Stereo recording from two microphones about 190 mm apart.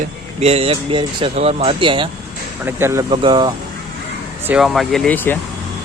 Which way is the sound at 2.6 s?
15° right (ahead or behind).